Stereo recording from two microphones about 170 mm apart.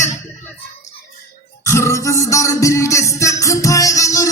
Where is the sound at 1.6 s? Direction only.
15° left (ahead or behind).